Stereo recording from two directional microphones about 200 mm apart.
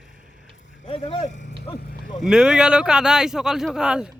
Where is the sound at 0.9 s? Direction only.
30° left (ahead or behind).